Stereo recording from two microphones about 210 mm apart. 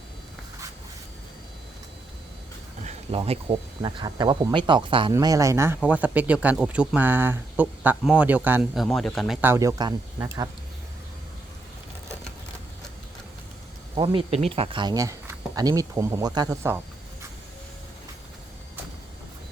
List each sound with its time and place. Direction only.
2.8 s speech: 30° right (ahead or behind); by 9.4 s centre (ahead or behind)
9.4 s speech: 15° right (ahead or behind)
13.9 s speech: 25° right (ahead or behind)